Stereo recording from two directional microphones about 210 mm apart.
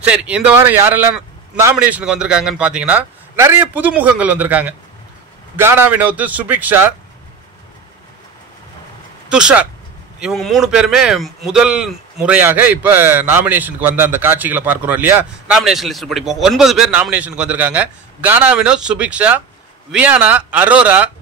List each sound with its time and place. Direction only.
0.0 s speech: 5° right (ahead or behind)
9.3 s speech: 5° right (ahead or behind)